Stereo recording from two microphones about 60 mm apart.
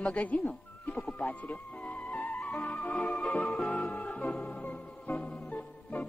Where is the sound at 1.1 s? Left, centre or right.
Left.